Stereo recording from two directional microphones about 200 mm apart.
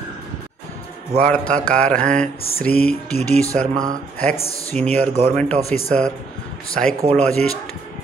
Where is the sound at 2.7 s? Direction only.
50° left (ahead or behind).